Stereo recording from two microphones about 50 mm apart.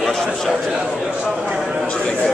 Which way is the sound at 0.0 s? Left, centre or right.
Centre.